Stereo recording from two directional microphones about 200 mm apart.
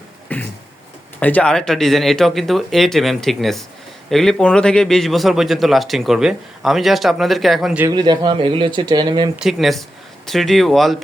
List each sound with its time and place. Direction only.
0.3 s a sound: 10° left (ahead or behind)
1.2 s a man's voice: 5° left (ahead or behind)
7.9 s speech: 20° right (ahead or behind)
9.3 s a man's voice: centre (ahead or behind)